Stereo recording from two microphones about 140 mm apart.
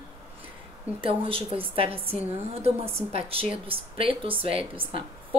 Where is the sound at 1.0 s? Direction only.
40° right (ahead or behind).